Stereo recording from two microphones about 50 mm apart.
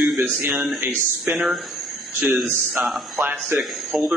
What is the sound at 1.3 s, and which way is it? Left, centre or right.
Speech, right.